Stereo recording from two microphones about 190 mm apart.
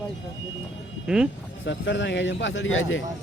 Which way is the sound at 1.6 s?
70° left (ahead or behind).